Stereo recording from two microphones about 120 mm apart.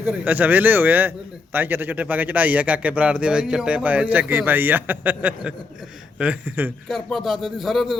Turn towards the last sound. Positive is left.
turn(degrees=0)  # may be behind; listen again after turning